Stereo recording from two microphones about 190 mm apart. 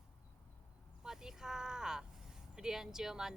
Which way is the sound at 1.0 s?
Centre (ahead or behind).